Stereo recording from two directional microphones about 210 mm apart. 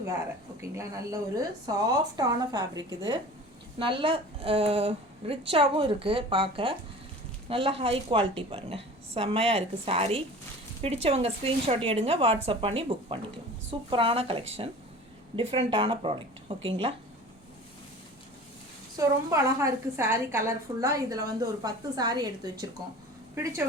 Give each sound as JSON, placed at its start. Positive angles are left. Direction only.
{"t": 0.6, "sound": "a woman's voice", "side_deg": -15}
{"t": 18.9, "sound": "a woman's voice", "side_deg": -15}